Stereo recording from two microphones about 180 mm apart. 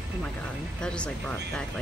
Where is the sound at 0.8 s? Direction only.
5° left (ahead or behind).